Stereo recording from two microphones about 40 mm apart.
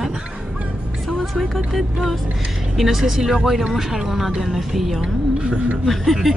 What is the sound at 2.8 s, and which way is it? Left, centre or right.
A woman's voice, centre.